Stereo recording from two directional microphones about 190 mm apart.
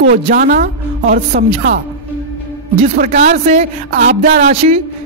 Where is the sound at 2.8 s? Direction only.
40° right (ahead or behind).